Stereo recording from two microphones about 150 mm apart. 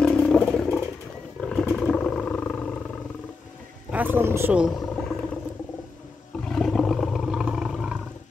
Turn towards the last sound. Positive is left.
turn(degrees=-5)  # may be behind; listen again after turning